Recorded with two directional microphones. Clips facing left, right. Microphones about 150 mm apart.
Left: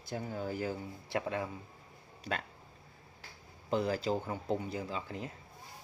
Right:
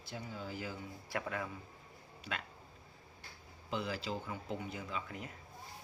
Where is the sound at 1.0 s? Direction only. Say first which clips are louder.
Left 5 dB; 25° left (ahead or behind).